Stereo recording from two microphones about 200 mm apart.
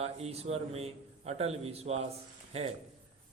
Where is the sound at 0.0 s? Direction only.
30° right (ahead or behind).